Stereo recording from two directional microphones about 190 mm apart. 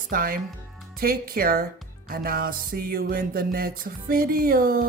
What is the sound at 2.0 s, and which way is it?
Music, 50° right (ahead or behind).